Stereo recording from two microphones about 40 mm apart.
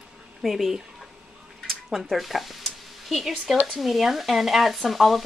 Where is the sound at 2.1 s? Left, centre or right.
Centre.